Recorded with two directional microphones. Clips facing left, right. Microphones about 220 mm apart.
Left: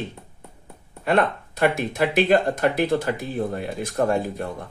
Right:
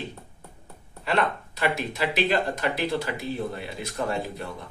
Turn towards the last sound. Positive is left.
turn(degrees=50)  # may be behind; listen again after turning